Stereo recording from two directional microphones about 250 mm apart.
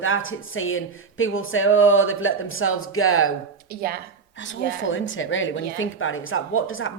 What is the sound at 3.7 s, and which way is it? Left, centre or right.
Speech, right.